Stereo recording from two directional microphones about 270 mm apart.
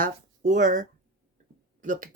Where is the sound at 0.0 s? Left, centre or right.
Right.